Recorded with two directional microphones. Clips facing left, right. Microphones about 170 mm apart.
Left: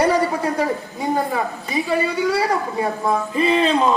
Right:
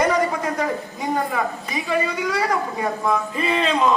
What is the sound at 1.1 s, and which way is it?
A man's voice, 30° left (ahead or behind).